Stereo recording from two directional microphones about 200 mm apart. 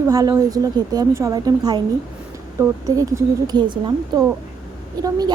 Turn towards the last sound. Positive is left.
turn(degrees=-20)  # may be behind; listen again after turning